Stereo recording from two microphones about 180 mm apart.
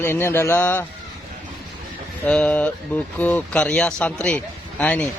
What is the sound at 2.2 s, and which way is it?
Speech, 5° left (ahead or behind).